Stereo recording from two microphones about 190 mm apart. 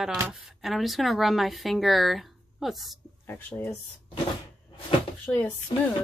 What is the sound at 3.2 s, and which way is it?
Speech, 10° left (ahead or behind).